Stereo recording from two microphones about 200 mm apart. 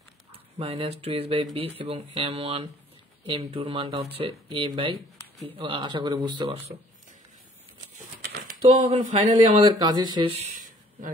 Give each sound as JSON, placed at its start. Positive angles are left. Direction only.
{"t": 0.3, "sound": "speech", "side_deg": -30}
{"t": 8.2, "sound": "a sound", "side_deg": -55}
{"t": 8.5, "sound": "speech", "side_deg": -30}
{"t": 9.7, "sound": "speech", "side_deg": -20}